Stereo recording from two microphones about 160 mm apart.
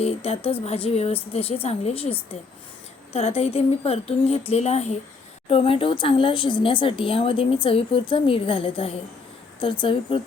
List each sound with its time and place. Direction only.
0.0 s speech: 40° left (ahead or behind)